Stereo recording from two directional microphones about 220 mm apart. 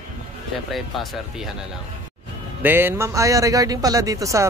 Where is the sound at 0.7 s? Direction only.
Centre (ahead or behind).